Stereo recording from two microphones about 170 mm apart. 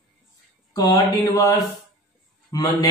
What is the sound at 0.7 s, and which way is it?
Speech, 25° left (ahead or behind).